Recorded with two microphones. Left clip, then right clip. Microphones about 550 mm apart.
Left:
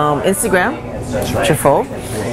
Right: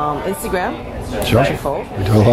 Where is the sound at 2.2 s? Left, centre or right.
Right.